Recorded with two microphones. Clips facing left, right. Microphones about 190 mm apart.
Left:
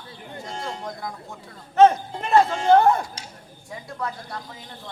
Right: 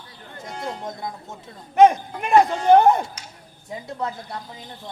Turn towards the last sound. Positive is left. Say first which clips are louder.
# right 2 dB
turn(degrees=-20)  # may be behind; listen again after turning